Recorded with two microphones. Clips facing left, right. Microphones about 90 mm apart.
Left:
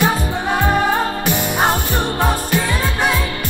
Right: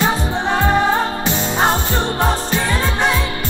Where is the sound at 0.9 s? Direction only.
20° right (ahead or behind).